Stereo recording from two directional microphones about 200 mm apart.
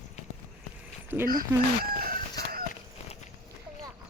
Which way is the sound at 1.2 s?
45° right (ahead or behind).